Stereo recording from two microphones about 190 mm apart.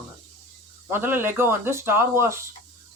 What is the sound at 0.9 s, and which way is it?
Speech, 10° right (ahead or behind).